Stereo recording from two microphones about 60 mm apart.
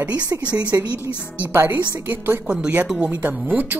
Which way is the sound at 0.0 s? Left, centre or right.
Right.